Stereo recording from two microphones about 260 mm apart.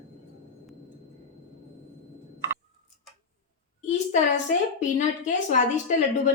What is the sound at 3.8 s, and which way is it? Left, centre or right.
A woman's voice, left.